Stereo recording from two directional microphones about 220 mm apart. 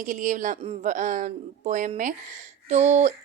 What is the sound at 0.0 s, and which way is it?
Speech, 35° right (ahead or behind).